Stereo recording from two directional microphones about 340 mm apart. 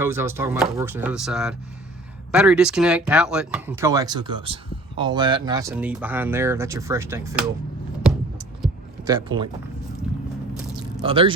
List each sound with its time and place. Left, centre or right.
0.0 s speech: centre
9.0 s speech: centre
11.0 s speech: centre